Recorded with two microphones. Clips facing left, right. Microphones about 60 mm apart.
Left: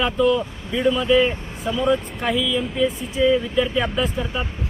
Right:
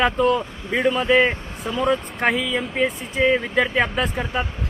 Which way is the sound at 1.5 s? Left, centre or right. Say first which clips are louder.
Left 3 dB; right.